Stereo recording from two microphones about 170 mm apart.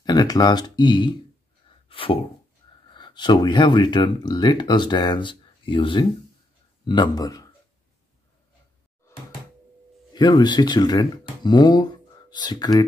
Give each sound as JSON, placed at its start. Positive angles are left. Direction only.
{"t": 0.0, "sound": "speech", "side_deg": 25}
{"t": 1.9, "sound": "a sound", "side_deg": 30}
{"t": 2.9, "sound": "a man's voice", "side_deg": 25}
{"t": 10.1, "sound": "speech", "side_deg": 25}